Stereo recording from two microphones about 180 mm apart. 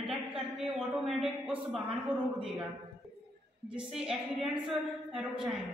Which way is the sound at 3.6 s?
5° right (ahead or behind).